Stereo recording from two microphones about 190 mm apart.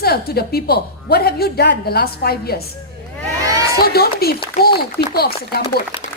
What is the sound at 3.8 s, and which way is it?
A woman's voice, 55° left (ahead or behind).